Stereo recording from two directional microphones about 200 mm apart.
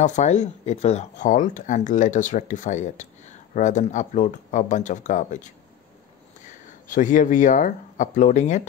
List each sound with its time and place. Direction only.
0.0 s speech: 35° left (ahead or behind)
6.9 s speech: 40° left (ahead or behind)